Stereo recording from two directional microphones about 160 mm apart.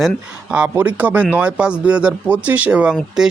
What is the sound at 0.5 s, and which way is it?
Speech, 10° right (ahead or behind).